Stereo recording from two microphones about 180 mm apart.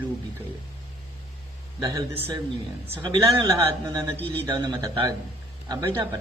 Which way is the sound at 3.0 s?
25° right (ahead or behind).